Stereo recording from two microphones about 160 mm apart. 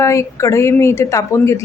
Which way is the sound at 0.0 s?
20° left (ahead or behind).